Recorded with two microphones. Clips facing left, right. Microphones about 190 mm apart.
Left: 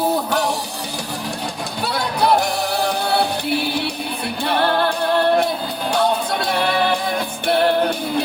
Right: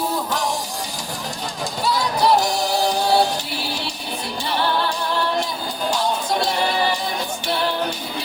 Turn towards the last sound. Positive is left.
turn(degrees=55)  # may be behind; listen again after turning